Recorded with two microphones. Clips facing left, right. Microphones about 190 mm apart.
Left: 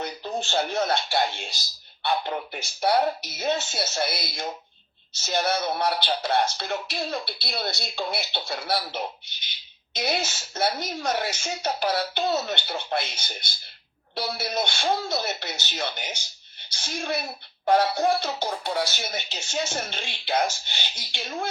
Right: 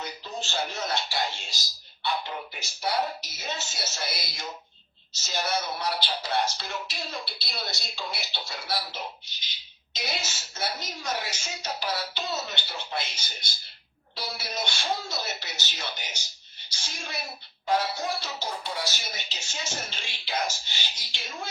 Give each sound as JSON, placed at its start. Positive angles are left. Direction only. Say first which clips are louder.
{"t": 0.0, "sound": "speech", "louder": "left 6 dB", "side_deg": 55}